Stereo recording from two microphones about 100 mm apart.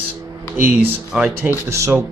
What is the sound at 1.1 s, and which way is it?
Speech, 10° right (ahead or behind).